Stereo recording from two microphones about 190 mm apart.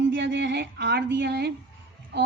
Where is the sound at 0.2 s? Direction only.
65° right (ahead or behind).